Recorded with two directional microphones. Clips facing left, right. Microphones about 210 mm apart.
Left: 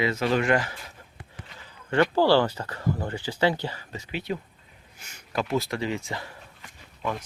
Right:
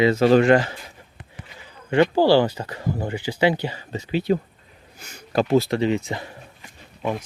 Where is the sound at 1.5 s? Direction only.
15° right (ahead or behind).